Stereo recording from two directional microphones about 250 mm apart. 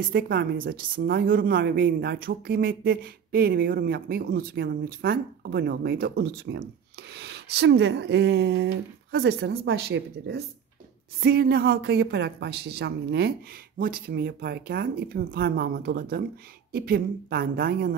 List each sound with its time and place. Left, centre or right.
0.0 s a woman's voice: right